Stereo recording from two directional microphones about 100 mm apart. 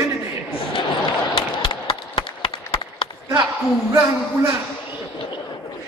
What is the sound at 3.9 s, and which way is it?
Speech, 25° right (ahead or behind).